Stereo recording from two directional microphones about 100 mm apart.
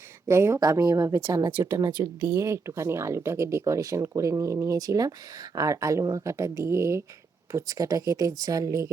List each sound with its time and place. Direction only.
0.3 s speech: 25° right (ahead or behind)